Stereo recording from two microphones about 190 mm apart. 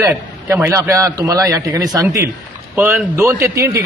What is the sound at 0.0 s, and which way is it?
A man's voice, 10° right (ahead or behind).